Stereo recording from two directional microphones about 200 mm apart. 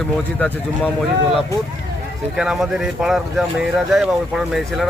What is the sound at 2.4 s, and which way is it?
Speech, centre (ahead or behind).